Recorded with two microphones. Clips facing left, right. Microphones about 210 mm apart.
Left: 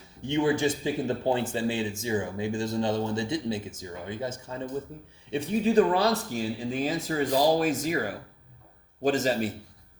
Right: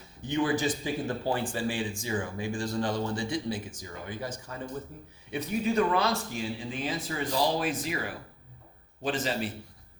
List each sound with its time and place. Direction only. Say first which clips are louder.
0.3 s a man's voice: left 3 dB; 25° left (ahead or behind); by 9.5 s 45° left (ahead or behind)